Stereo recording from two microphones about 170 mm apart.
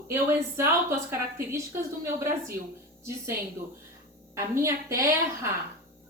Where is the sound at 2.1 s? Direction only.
15° right (ahead or behind).